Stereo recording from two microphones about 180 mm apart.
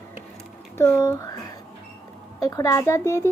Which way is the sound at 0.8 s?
15° left (ahead or behind).